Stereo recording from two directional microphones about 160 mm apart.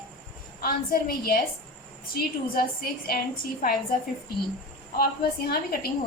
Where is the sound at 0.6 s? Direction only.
65° left (ahead or behind).